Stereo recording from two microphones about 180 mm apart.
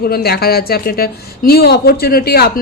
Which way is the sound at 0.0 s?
60° left (ahead or behind).